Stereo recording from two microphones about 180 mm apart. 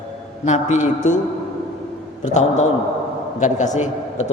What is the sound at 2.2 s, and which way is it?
Speech, 40° left (ahead or behind).